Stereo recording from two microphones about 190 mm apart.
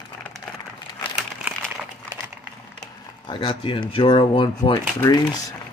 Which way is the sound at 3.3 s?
30° left (ahead or behind).